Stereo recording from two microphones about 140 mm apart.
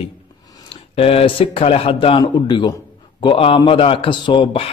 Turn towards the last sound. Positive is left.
turn(degrees=40)  # may be behind; listen again after turning